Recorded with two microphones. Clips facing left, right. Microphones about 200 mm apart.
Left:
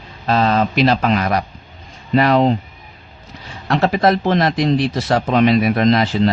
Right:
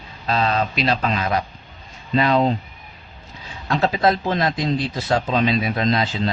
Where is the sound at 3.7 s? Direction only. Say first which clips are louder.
Left 4 dB; 70° left (ahead or behind).